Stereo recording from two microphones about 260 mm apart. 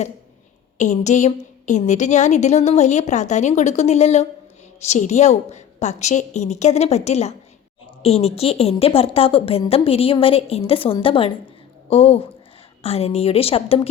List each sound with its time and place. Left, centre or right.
0.8 s a woman's voice: left